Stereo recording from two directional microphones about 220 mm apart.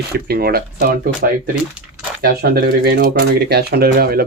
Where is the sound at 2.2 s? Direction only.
45° right (ahead or behind).